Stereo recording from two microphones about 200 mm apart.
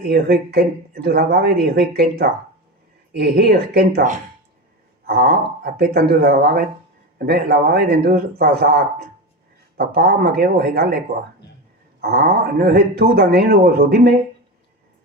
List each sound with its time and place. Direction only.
0.1 s a man's voice: 50° right (ahead or behind)